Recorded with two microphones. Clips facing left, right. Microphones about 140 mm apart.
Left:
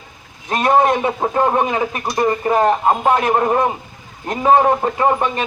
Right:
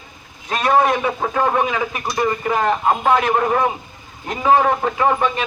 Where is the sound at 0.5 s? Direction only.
20° left (ahead or behind).